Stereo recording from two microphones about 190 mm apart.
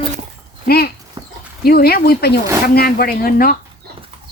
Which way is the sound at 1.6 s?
55° left (ahead or behind).